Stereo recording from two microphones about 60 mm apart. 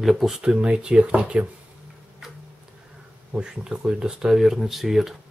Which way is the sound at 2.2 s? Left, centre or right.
Centre.